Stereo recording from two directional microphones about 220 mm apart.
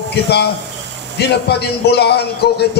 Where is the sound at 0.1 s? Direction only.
50° left (ahead or behind).